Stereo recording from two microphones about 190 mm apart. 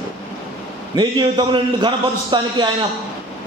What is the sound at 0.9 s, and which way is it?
A man's voice, 20° right (ahead or behind).